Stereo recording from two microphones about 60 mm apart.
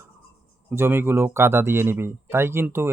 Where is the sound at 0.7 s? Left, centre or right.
Right.